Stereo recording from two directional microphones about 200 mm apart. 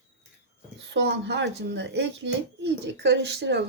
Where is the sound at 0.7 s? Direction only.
60° right (ahead or behind).